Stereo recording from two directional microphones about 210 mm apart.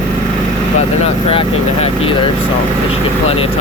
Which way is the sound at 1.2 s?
30° left (ahead or behind).